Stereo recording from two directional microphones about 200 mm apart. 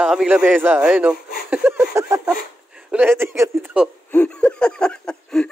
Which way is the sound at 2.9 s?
10° right (ahead or behind).